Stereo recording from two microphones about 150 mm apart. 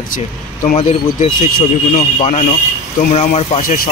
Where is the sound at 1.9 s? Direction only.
45° left (ahead or behind).